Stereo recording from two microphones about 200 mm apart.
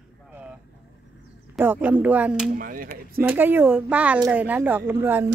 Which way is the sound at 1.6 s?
10° right (ahead or behind).